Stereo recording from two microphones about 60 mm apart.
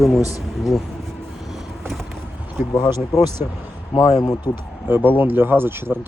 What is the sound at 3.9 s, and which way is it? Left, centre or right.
Speech, left.